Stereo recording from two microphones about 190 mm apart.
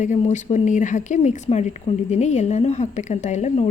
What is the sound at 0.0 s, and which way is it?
A woman's voice, 40° left (ahead or behind).